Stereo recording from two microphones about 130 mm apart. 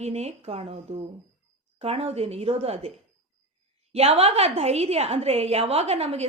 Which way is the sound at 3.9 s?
50° right (ahead or behind).